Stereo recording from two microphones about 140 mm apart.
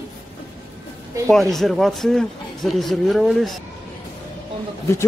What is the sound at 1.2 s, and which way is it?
Speech, centre (ahead or behind).